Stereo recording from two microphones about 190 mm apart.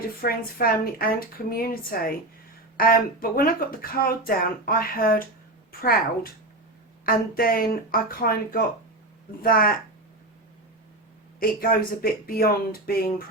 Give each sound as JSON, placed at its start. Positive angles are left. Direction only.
{"t": 0.2, "sound": "speech", "side_deg": 50}
{"t": 11.3, "sound": "speech", "side_deg": 50}